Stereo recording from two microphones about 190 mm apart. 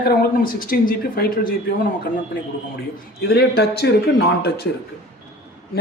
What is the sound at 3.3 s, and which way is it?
A man's voice, 60° left (ahead or behind).